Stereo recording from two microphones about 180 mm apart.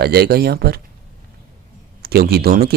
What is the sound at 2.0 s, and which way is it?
Speech, 60° right (ahead or behind).